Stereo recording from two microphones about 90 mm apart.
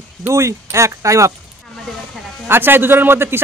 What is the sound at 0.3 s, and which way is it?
Speech, 35° right (ahead or behind).